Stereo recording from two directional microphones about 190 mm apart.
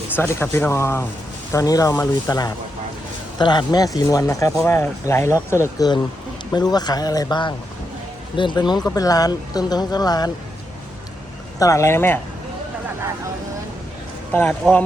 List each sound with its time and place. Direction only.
0.2 s speech: 10° left (ahead or behind)
11.6 s speech: 15° left (ahead or behind)
14.6 s speech: 5° left (ahead or behind)